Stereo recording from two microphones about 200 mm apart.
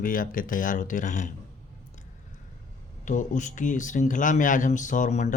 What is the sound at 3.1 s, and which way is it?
Speech, 40° left (ahead or behind).